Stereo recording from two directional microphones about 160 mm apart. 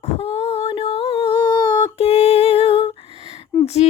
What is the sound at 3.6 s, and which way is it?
Speech, 40° left (ahead or behind).